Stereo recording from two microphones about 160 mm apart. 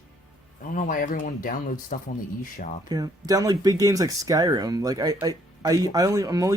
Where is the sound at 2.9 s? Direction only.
20° right (ahead or behind).